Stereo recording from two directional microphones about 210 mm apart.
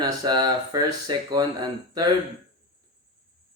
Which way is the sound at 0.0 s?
20° right (ahead or behind).